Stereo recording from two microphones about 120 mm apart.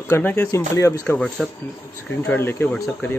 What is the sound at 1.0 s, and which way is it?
Speech, 5° left (ahead or behind).